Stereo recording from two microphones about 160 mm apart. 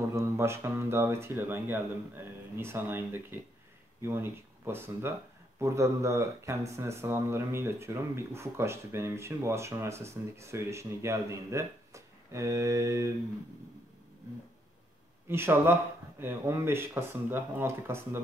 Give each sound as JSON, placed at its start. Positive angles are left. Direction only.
{"t": 0.1, "sound": "speech", "side_deg": -15}
{"t": 15.2, "sound": "speech", "side_deg": -15}